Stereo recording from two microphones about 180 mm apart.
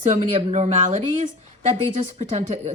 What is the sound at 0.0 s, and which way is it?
A woman's voice, 40° right (ahead or behind).